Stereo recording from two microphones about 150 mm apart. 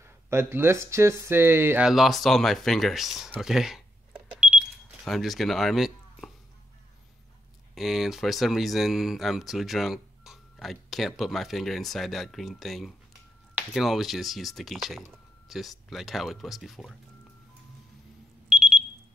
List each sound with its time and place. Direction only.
0.0 s speech: 15° right (ahead or behind)
1.9 s speech: centre (ahead or behind)
7.7 s speech: centre (ahead or behind)
18.5 s alarm: 5° right (ahead or behind)